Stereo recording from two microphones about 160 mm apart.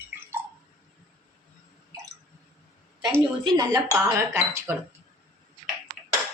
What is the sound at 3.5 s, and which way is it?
Speech, 25° right (ahead or behind).